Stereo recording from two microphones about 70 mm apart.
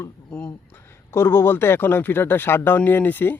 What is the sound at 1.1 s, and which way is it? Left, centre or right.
A man's voice, left.